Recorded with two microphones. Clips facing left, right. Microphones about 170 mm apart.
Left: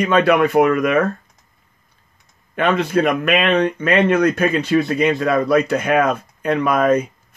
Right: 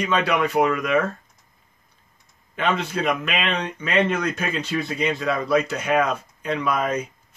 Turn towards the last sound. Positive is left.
turn(degrees=55)  # may be behind; listen again after turning